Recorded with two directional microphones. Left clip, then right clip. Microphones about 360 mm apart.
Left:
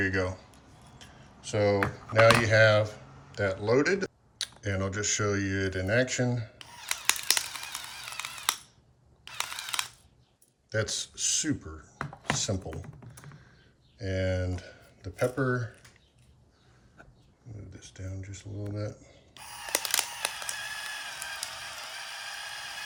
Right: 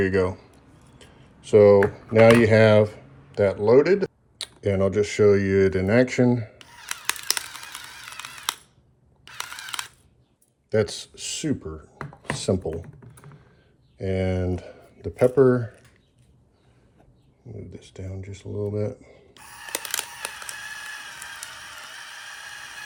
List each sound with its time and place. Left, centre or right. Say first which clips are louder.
0.0 s speech: right 7 dB; centre
0.9 s a sound: right 1 dB; centre
2.4 s speech: right 6 dB; centre
6.6 s a sound: even; centre
9.2 s single-lens reflex camera: right 1 dB; centre
10.7 s speech: right 8 dB; centre
11.6 s speech: right 9 dB; right
12.2 s speech: right 6 dB; centre
12.7 s typing: right 9 dB; centre
14.0 s speech: right 5 dB; centre
18.7 s speech: right 10 dB; centre
19.3 s a sound: left 1 dB; centre